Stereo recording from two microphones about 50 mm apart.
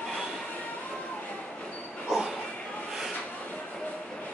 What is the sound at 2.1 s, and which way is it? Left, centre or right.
Dog, centre.